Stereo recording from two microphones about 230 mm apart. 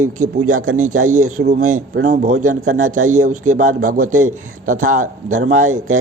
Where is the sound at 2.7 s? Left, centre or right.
Right.